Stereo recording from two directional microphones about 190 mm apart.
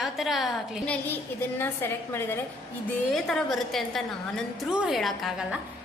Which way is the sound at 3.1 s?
Centre (ahead or behind).